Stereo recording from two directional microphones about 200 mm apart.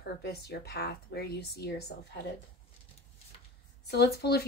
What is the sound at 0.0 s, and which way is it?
Speech, 50° left (ahead or behind).